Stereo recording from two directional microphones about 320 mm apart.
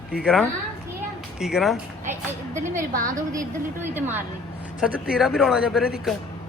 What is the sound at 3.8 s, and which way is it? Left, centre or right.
A woman's voice, centre.